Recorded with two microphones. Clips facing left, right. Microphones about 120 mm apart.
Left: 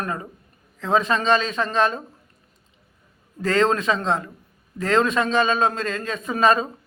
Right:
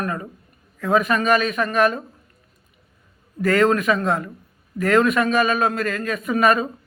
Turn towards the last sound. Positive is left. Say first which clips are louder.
# right 1 dB
turn(degrees=30)  # may be behind; listen again after turning